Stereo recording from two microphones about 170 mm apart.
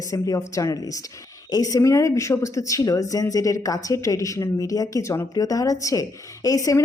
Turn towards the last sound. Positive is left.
turn(degrees=20)  # may be behind; listen again after turning